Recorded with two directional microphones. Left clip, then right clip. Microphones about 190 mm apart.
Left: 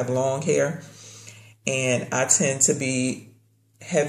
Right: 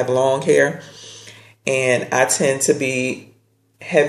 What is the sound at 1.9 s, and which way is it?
Speech, 45° right (ahead or behind).